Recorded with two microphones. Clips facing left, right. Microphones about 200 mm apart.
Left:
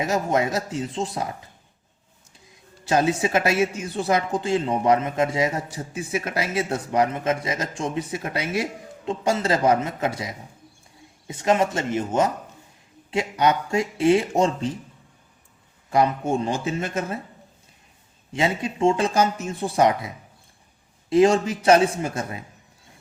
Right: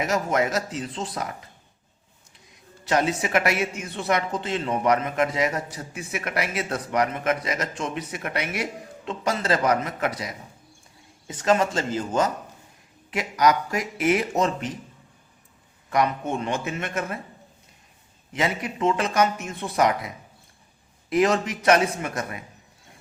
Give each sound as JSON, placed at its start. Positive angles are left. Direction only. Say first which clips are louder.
{"t": 0.0, "sound": "a man's voice", "louder": "left 1 dB", "side_deg": 30}
{"t": 2.8, "sound": "a man's voice", "louder": "left 3 dB", "side_deg": 30}
{"t": 15.9, "sound": "speech", "louder": "left 3 dB", "side_deg": 30}
{"t": 18.3, "sound": "a man's voice", "louder": "left 3 dB", "side_deg": 30}